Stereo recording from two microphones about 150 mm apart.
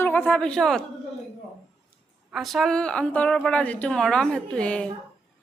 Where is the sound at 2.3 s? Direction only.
Centre (ahead or behind).